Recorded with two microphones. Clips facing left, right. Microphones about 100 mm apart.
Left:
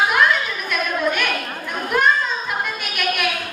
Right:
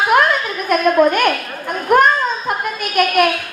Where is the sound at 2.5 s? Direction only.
45° right (ahead or behind).